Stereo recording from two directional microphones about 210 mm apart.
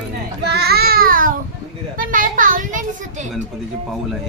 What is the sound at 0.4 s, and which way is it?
Child singing, 50° right (ahead or behind).